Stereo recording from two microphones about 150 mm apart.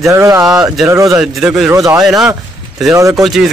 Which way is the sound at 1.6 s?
20° right (ahead or behind).